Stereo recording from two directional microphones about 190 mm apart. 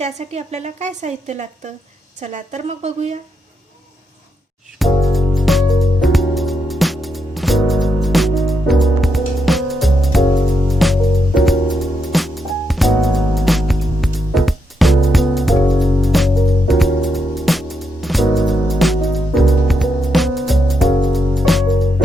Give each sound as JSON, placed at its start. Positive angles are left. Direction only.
{"t": 0.0, "sound": "a woman's voice", "side_deg": -35}
{"t": 4.8, "sound": "music", "side_deg": 0}